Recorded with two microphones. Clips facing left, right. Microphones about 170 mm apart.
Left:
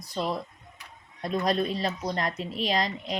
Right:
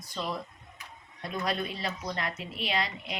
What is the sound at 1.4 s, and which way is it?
Speech, 35° left (ahead or behind).